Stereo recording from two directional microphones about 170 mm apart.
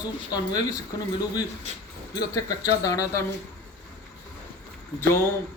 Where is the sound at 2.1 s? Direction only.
20° left (ahead or behind).